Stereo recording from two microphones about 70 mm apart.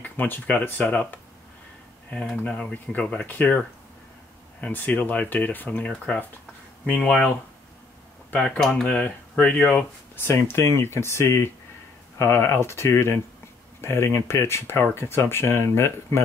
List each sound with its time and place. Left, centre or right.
0.0 s speech: left
2.3 s speech: centre
4.6 s speech: left
8.4 s speech: centre
10.1 s speech: left